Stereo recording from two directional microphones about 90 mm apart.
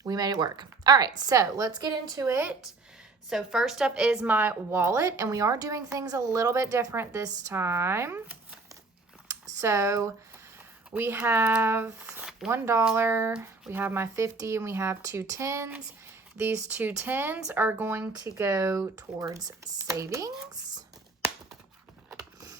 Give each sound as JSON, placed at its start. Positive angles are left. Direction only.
{"t": 0.0, "sound": "speech", "side_deg": -45}
{"t": 2.2, "sound": "speech", "side_deg": -25}
{"t": 3.2, "sound": "a woman's voice", "side_deg": -5}
{"t": 4.3, "sound": "a woman's voice", "side_deg": -20}
{"t": 12.5, "sound": "speech", "side_deg": -30}
{"t": 18.2, "sound": "a woman's voice", "side_deg": -35}